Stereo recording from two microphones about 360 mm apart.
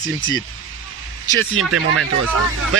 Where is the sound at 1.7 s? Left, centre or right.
Right.